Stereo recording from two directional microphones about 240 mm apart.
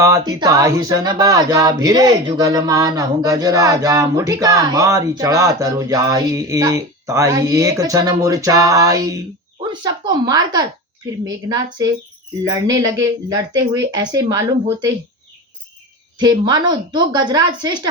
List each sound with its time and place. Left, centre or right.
0.0 s speech: centre
16.1 s speech: centre